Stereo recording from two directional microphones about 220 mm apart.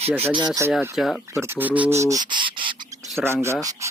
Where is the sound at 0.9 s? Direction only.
Centre (ahead or behind).